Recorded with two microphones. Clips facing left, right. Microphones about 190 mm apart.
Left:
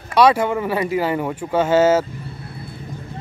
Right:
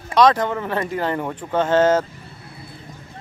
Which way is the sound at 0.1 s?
10° left (ahead or behind).